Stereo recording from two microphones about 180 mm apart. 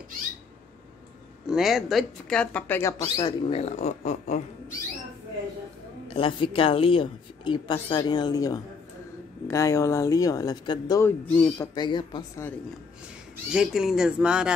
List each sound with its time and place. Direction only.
1.5 s speech: centre (ahead or behind); by 4.7 s 40° left (ahead or behind)
6.0 s a woman's voice: 30° left (ahead or behind); by 11.7 s 10° left (ahead or behind)
11.7 s a woman's voice: 25° left (ahead or behind)
13.5 s speech: 5° right (ahead or behind)